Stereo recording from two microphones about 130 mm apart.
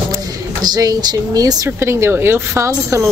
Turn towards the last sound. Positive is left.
turn(degrees=-20)  # may be behind; listen again after turning